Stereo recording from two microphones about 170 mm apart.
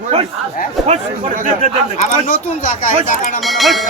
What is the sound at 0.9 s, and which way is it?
Speech, 50° right (ahead or behind).